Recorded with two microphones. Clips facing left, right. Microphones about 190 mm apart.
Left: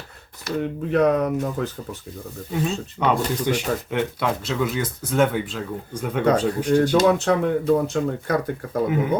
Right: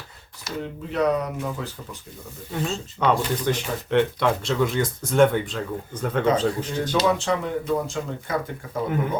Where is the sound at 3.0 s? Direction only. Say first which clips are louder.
Even; 10° left (ahead or behind).